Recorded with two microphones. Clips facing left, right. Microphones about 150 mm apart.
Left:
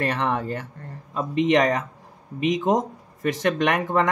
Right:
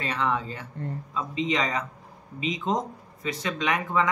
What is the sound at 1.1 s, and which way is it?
Speech, 55° left (ahead or behind).